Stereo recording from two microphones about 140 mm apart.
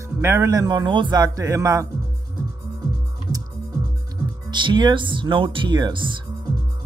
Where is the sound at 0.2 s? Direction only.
20° right (ahead or behind).